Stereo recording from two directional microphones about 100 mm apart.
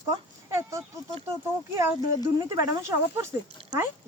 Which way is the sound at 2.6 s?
35° right (ahead or behind).